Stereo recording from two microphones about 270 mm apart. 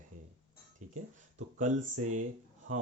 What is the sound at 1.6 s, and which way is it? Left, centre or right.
Speech, right.